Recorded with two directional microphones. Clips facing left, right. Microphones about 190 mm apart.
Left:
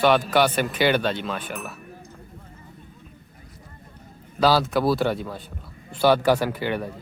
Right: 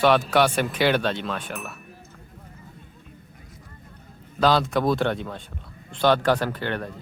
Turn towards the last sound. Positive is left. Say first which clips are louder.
# left 2 dB
turn(degrees=10)  # may be behind; listen again after turning